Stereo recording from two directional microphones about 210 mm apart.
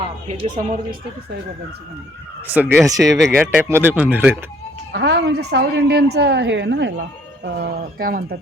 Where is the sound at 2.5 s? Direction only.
10° right (ahead or behind).